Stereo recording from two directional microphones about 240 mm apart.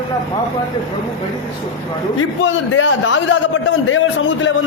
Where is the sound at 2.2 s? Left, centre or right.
Left.